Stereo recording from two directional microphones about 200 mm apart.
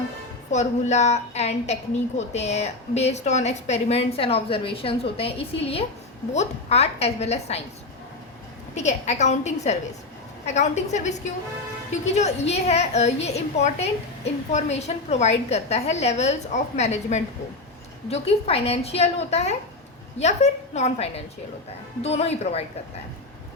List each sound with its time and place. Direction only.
0.5 s a woman's voice: 35° left (ahead or behind)
8.7 s a woman's voice: 35° left (ahead or behind)